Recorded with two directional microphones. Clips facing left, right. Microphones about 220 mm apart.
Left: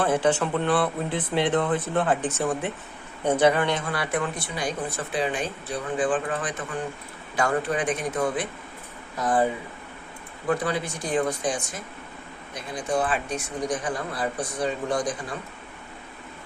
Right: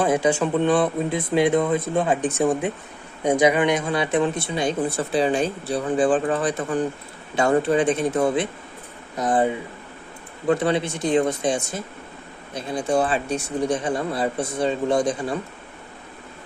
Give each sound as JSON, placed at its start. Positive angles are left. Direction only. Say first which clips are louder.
{"t": 0.0, "sound": "speech", "louder": "right 3 dB", "side_deg": -10}
{"t": 10.5, "sound": "speech", "louder": "right 5 dB", "side_deg": -25}